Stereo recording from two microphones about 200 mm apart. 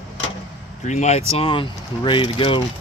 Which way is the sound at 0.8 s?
35° left (ahead or behind).